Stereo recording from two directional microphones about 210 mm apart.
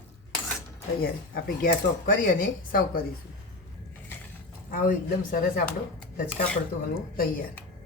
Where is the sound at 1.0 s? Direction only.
45° left (ahead or behind).